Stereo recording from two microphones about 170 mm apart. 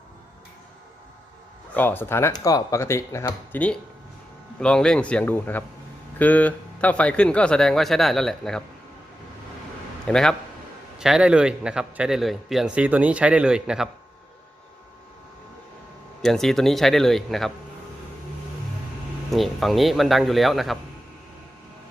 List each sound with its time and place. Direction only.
1.7 s a man's voice: 10° left (ahead or behind)
10.1 s a man's voice: 5° left (ahead or behind)
16.2 s a man's voice: centre (ahead or behind)
19.3 s a man's voice: centre (ahead or behind)